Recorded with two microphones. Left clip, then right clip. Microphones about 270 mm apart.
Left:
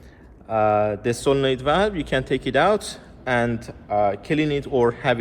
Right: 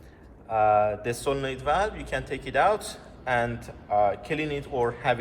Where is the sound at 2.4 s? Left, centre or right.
Left.